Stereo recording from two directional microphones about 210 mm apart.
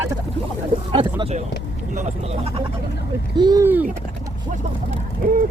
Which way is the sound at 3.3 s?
20° right (ahead or behind).